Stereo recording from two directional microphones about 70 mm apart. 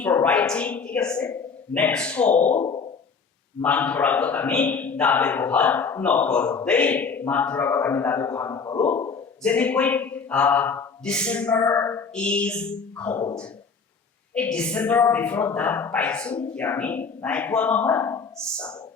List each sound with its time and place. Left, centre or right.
0.0 s a man's voice: left
0.3 s a woman's voice: centre; by 8.5 s left
8.5 s a man's voice: left
9.4 s a man's voice: centre
11.7 s speech: left
12.1 s a woman's voice: centre
14.3 s a man's voice: centre